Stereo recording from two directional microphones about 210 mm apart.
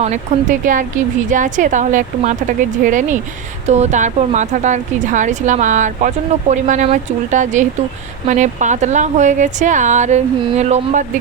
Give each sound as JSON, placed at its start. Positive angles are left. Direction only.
{"t": 0.0, "sound": "speech", "side_deg": -35}